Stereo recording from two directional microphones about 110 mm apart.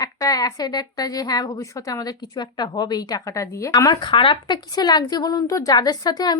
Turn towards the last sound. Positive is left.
turn(degrees=35)  # may be behind; listen again after turning